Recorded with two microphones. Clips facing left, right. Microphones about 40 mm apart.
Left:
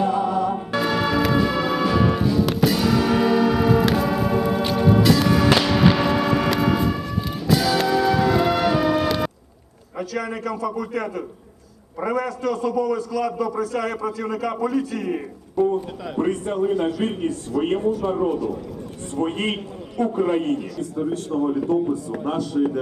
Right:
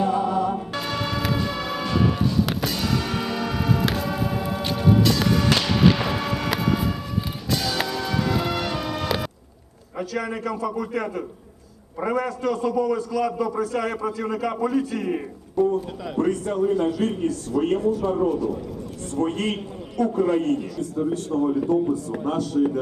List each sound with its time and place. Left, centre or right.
0.0 s music: left
0.3 s music: centre
10.9 s a man's voice: left
12.5 s a man's voice: right
15.5 s a man's voice: centre